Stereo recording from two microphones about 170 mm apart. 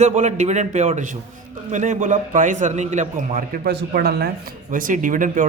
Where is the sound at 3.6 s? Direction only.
65° right (ahead or behind).